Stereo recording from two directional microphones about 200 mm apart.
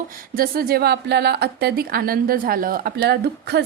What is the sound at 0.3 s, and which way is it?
A woman's voice, 50° right (ahead or behind).